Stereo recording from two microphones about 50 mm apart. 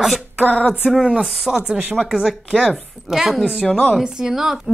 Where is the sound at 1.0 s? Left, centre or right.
Centre.